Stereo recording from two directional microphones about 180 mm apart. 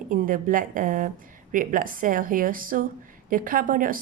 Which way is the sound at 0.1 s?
50° right (ahead or behind).